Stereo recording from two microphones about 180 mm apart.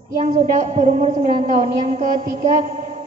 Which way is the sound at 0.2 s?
45° right (ahead or behind).